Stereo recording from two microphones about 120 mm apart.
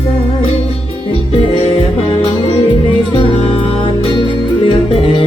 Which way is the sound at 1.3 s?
50° left (ahead or behind).